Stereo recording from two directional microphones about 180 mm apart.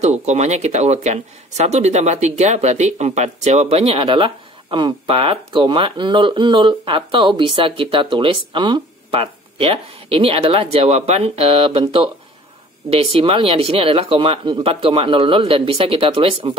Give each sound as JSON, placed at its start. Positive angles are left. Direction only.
{"t": 0.0, "sound": "speech", "side_deg": -40}